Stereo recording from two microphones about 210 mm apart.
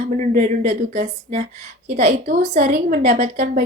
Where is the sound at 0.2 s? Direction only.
35° right (ahead or behind).